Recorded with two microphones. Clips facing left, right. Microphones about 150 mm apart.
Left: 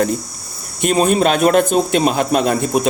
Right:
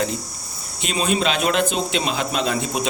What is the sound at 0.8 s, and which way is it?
A man's voice, 50° left (ahead or behind).